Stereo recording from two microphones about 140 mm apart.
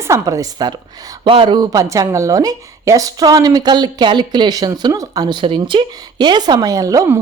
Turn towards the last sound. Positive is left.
turn(degrees=-25)  # may be behind; listen again after turning